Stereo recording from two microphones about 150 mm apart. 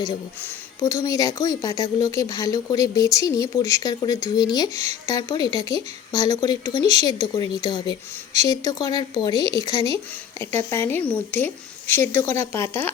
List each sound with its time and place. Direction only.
0.8 s speech: 20° left (ahead or behind)
4.7 s speech: 50° right (ahead or behind)
5.0 s speech: 25° left (ahead or behind)
6.7 s speech: 45° right (ahead or behind)
7.0 s a woman's voice: 25° left (ahead or behind)